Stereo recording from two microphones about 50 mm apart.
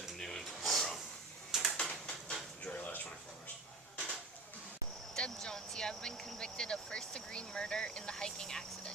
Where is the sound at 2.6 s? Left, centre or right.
Left.